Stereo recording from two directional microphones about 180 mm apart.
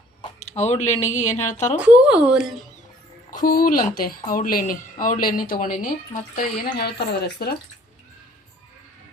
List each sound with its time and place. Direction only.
0.2 s a woman's voice: 35° left (ahead or behind)
1.8 s speech: 5° right (ahead or behind)
3.3 s speech: 50° left (ahead or behind)
6.7 s speech: 65° left (ahead or behind)